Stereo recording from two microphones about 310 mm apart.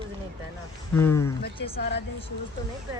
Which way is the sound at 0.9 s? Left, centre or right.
Centre.